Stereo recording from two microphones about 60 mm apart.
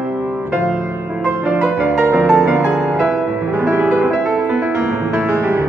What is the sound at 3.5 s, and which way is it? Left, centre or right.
Music, right.